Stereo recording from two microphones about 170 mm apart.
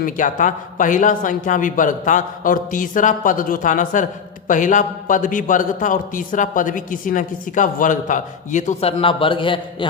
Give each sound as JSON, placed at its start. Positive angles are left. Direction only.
{"t": 0.0, "sound": "a man's voice", "side_deg": 50}